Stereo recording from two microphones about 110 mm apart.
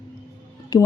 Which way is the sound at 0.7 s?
40° left (ahead or behind).